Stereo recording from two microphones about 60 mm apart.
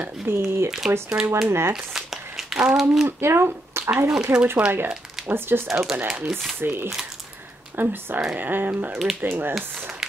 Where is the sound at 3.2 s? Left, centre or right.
Right.